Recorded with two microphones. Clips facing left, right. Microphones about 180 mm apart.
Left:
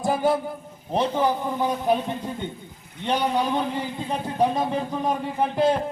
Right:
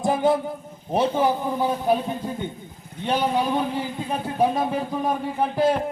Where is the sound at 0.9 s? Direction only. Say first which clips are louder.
Right 2 dB; 10° right (ahead or behind).